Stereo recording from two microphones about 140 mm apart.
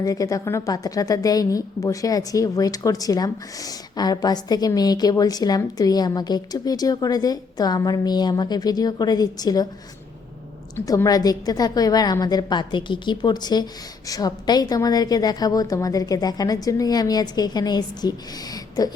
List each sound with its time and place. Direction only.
0.0 s a woman's voice: 25° left (ahead or behind)
10.8 s a woman's voice: 25° left (ahead or behind)